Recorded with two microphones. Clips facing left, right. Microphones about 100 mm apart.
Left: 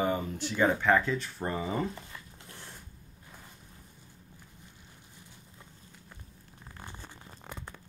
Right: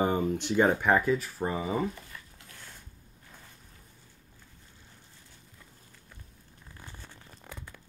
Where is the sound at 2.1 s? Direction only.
30° left (ahead or behind).